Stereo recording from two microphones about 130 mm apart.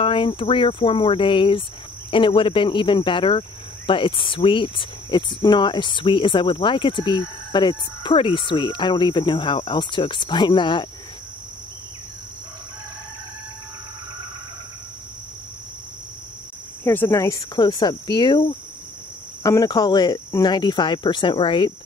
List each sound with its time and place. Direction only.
0.0 s speech: 40° left (ahead or behind)
16.8 s speech: 20° left (ahead or behind); by 21.7 s 40° left (ahead or behind)